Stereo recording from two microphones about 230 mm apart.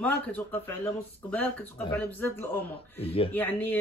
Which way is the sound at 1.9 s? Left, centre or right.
Centre.